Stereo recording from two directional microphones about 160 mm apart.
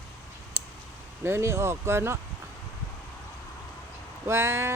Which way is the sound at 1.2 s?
15° right (ahead or behind).